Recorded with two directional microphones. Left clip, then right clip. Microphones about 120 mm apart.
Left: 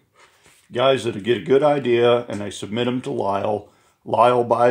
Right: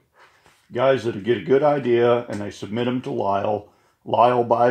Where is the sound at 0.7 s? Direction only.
15° right (ahead or behind).